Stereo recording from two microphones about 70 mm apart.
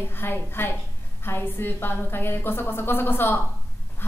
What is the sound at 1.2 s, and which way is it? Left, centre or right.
A woman's voice, left.